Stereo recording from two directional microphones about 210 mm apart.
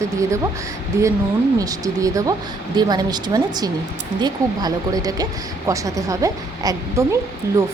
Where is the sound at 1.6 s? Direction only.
15° right (ahead or behind).